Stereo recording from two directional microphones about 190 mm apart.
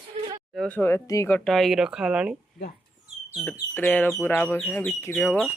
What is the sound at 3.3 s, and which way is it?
Speech, 5° left (ahead or behind).